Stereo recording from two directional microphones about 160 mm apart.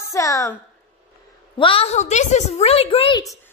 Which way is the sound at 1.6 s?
35° left (ahead or behind).